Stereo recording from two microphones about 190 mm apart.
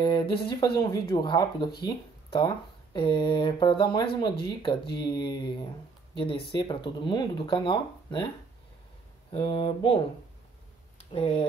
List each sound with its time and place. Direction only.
0.0 s speech: 25° left (ahead or behind)
9.3 s speech: 30° left (ahead or behind)
11.1 s speech: 30° left (ahead or behind)